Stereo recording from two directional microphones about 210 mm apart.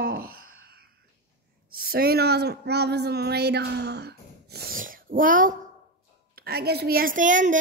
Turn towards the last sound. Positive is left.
turn(degrees=-40)  # may be behind; listen again after turning